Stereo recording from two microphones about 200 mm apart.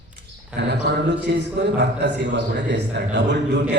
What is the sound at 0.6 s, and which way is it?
A man's voice, 60° right (ahead or behind).